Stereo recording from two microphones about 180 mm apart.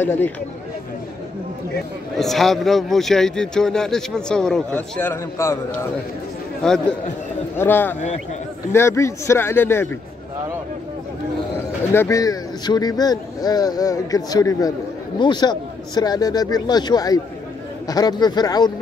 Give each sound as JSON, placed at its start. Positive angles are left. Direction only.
{"t": 0.0, "sound": "speech", "side_deg": 10}
{"t": 2.1, "sound": "a man's voice", "side_deg": 0}
{"t": 6.6, "sound": "a man's voice", "side_deg": 5}
{"t": 11.9, "sound": "speech", "side_deg": 15}